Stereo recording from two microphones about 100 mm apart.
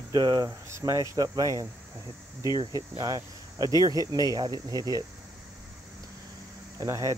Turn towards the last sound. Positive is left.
turn(degrees=-35)  # may be behind; listen again after turning